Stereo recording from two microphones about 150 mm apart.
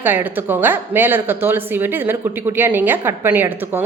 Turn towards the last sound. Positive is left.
turn(degrees=-15)  # may be behind; listen again after turning